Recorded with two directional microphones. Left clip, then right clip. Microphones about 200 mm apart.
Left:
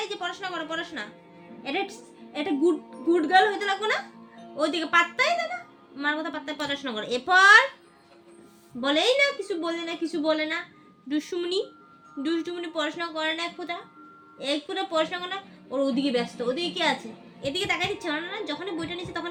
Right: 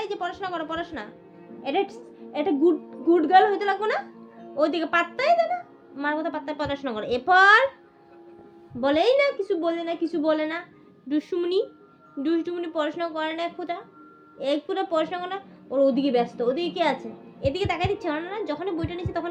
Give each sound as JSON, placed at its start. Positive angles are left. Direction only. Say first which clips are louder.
{"t": 0.0, "sound": "a woman's voice", "louder": "right 2 dB", "side_deg": 25}
{"t": 8.8, "sound": "speech", "louder": "right 2 dB", "side_deg": 25}